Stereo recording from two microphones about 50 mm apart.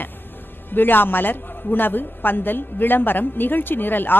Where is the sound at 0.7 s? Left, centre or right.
Left.